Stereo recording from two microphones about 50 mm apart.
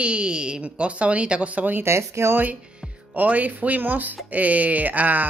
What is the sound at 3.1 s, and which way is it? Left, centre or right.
Speech, right.